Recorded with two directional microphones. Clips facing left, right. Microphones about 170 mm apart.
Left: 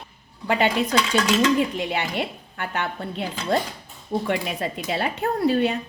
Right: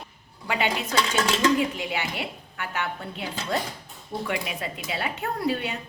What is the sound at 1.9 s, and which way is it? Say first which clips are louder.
A woman's voice: left 4 dB; 40° left (ahead or behind).